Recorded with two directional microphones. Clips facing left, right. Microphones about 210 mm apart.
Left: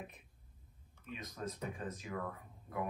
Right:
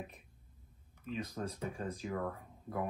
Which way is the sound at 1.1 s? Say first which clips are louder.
Right 4 dB; 30° right (ahead or behind).